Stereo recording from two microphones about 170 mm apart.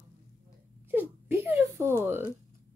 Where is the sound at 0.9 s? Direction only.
10° right (ahead or behind).